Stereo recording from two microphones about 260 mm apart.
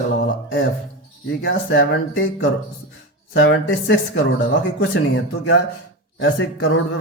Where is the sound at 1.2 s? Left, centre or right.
Left.